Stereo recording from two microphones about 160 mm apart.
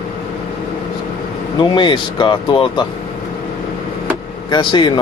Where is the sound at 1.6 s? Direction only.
30° left (ahead or behind).